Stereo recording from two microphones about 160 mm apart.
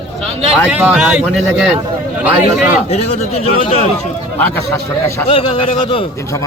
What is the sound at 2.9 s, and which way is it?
Speech, 40° left (ahead or behind).